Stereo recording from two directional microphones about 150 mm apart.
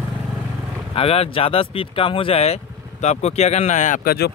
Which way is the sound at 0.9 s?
40° left (ahead or behind).